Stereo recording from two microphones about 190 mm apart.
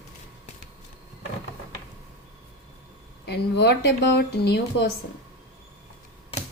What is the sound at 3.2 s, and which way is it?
Speech, 60° left (ahead or behind).